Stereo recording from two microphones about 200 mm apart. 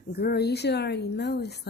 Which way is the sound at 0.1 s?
55° left (ahead or behind).